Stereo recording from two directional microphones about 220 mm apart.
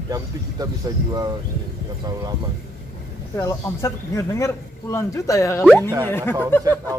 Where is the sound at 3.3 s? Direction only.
15° left (ahead or behind).